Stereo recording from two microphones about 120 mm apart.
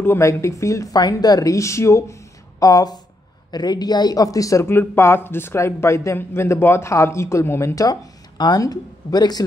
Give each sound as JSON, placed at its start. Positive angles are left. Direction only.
{"t": 0.0, "sound": "speech", "side_deg": 20}